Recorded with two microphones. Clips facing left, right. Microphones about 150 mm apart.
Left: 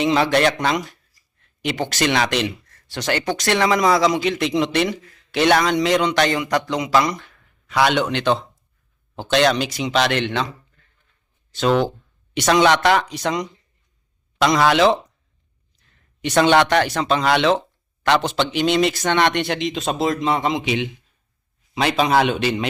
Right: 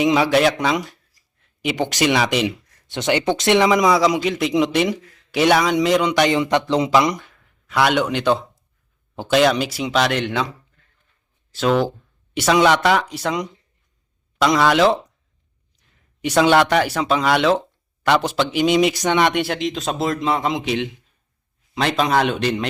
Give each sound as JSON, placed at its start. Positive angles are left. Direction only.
{"t": 0.0, "sound": "speech", "side_deg": -10}
{"t": 1.7, "sound": "speech", "side_deg": -20}
{"t": 6.4, "sound": "a man's voice", "side_deg": -30}
{"t": 6.9, "sound": "speech", "side_deg": -15}
{"t": 7.7, "sound": "speech", "side_deg": -5}
{"t": 11.5, "sound": "speech", "side_deg": 0}